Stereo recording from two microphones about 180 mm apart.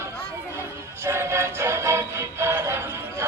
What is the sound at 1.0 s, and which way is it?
Music, 15° right (ahead or behind).